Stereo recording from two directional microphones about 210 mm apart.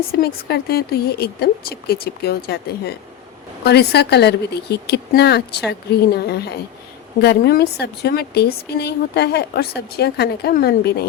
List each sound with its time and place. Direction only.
0.1 s a woman's voice: 45° left (ahead or behind)